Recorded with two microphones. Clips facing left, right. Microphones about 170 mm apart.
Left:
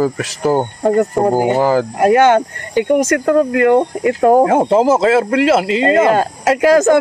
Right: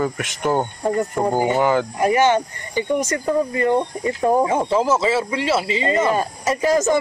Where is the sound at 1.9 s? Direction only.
65° left (ahead or behind).